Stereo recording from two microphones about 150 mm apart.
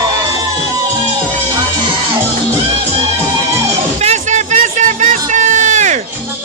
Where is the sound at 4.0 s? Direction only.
50° right (ahead or behind).